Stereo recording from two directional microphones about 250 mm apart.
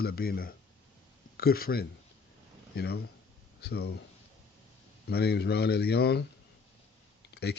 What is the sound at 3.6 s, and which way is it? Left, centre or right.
Speech, left.